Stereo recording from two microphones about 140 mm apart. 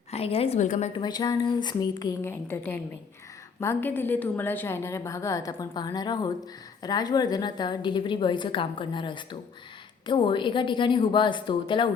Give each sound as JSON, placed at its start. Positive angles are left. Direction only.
{"t": 0.1, "sound": "a woman's voice", "side_deg": 45}
{"t": 0.9, "sound": "a woman's voice", "side_deg": 30}
{"t": 2.2, "sound": "a woman's voice", "side_deg": 15}